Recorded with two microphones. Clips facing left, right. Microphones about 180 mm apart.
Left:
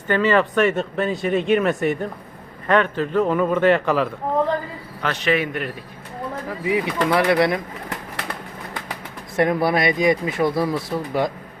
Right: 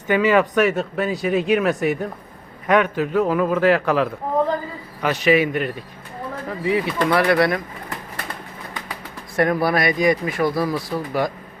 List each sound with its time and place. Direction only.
0.1 s speech: 10° right (ahead or behind)
0.5 s a man's voice: centre (ahead or behind)
2.6 s a man's voice: 15° right (ahead or behind)
6.7 s speech: 15° left (ahead or behind)
9.3 s speech: 20° left (ahead or behind)